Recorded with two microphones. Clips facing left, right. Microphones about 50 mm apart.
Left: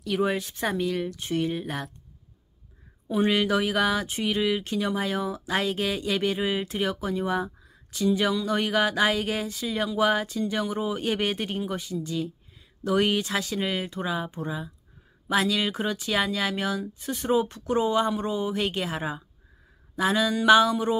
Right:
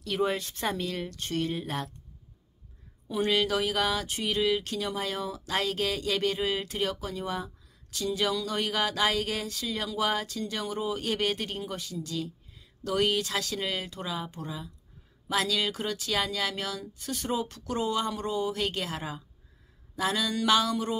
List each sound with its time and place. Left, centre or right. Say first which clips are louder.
0.0 s speech: left 3 dB; centre
3.1 s speech: left 3 dB; left